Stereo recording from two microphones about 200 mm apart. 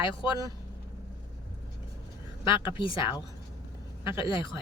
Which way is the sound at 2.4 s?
25° left (ahead or behind).